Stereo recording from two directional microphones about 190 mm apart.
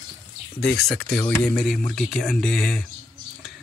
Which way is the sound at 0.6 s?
5° left (ahead or behind).